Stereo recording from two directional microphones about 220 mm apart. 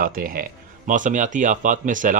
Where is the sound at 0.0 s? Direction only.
40° right (ahead or behind).